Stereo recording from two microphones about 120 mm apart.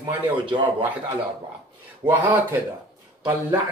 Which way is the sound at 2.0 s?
15° right (ahead or behind).